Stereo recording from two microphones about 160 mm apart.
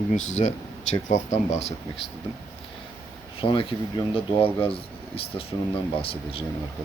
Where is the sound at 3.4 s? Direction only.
35° left (ahead or behind).